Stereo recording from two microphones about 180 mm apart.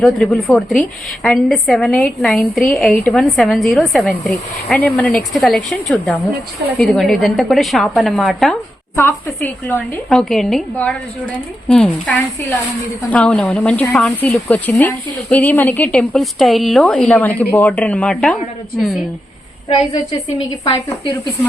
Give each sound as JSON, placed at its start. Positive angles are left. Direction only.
{"t": 0.0, "sound": "a woman's voice", "side_deg": 0}
{"t": 9.0, "sound": "speech", "side_deg": 15}
{"t": 10.1, "sound": "a woman's voice", "side_deg": 0}
{"t": 20.7, "sound": "speech", "side_deg": 20}